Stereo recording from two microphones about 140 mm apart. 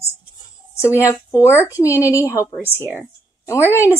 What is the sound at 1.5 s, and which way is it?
A woman's voice, 20° left (ahead or behind).